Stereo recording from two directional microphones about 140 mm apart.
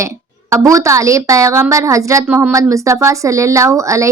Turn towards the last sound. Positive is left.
turn(degrees=-20)  # may be behind; listen again after turning